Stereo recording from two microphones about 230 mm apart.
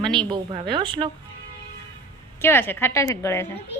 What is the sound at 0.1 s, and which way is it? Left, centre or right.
A woman's voice, right.